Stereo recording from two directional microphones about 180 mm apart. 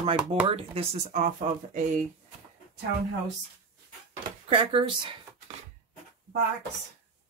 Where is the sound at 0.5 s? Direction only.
30° right (ahead or behind).